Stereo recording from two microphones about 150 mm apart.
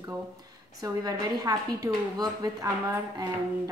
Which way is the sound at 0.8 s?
25° right (ahead or behind).